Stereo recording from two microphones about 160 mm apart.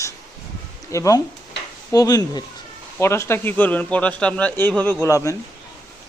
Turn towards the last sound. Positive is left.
turn(degrees=15)  # may be behind; listen again after turning